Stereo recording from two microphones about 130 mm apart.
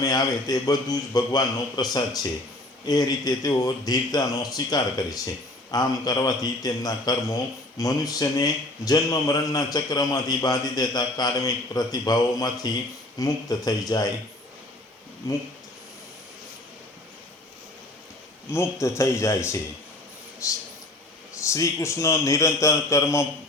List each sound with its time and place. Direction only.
0.0 s a man's voice: 30° left (ahead or behind)
18.5 s a man's voice: 20° left (ahead or behind)